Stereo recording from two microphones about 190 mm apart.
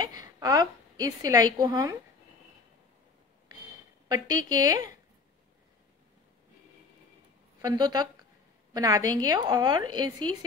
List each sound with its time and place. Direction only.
0.4 s a woman's voice: 20° right (ahead or behind)
4.1 s a woman's voice: 20° right (ahead or behind)
7.6 s a woman's voice: 20° right (ahead or behind)